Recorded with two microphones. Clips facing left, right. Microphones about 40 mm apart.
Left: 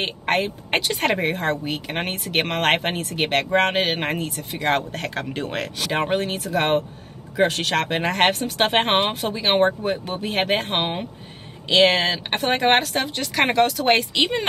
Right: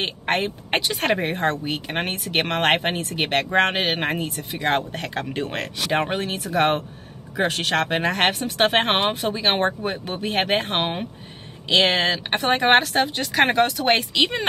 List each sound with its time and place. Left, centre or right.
0.7 s speech: centre
14.1 s speech: centre